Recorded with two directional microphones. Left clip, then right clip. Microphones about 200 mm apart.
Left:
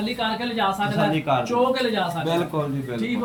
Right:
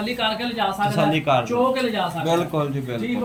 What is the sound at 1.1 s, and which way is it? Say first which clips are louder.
Speech: right 3 dB; 45° right (ahead or behind).